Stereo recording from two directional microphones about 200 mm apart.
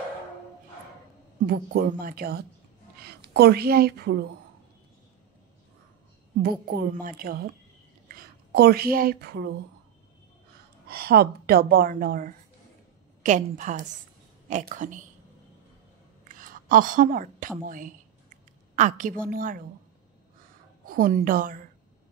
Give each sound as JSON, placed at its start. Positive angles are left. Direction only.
{"t": 1.4, "sound": "a woman's voice", "side_deg": -50}
{"t": 6.7, "sound": "a woman's voice", "side_deg": -50}
{"t": 10.9, "sound": "a woman's voice", "side_deg": -50}
{"t": 16.3, "sound": "a woman's voice", "side_deg": -45}
{"t": 20.8, "sound": "a woman's voice", "side_deg": -45}